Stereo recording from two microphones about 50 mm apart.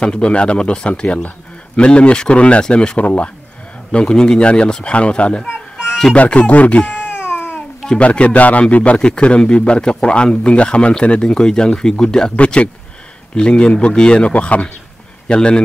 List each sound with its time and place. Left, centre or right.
0.0 s speech: centre
3.0 s speech: left
7.2 s a sound: left
8.0 s speech: left